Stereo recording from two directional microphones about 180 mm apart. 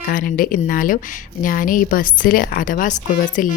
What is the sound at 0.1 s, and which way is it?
A woman's voice, 50° left (ahead or behind).